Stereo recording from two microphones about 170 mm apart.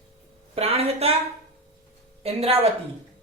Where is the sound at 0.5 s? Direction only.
35° right (ahead or behind).